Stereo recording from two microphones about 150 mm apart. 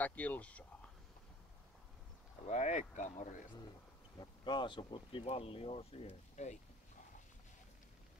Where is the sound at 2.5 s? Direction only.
50° left (ahead or behind).